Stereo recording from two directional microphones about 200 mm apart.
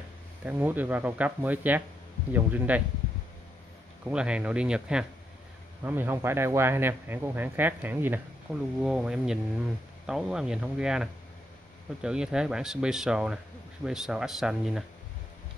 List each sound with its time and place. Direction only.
0.5 s speech: 10° right (ahead or behind)
4.0 s speech: 5° right (ahead or behind)